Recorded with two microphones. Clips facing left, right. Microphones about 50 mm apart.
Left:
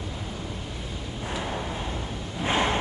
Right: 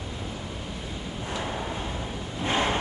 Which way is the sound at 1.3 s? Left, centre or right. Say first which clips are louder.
Even; centre.